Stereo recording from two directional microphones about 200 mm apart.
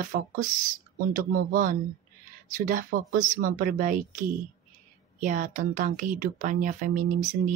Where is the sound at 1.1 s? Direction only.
45° right (ahead or behind).